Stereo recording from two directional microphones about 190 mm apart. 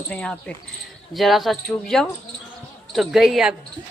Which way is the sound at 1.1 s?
Centre (ahead or behind).